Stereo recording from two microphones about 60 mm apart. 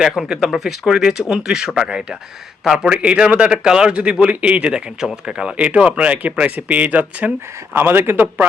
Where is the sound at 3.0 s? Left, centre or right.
Centre.